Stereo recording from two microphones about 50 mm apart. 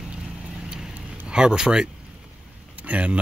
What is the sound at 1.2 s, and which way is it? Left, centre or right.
Speech, centre.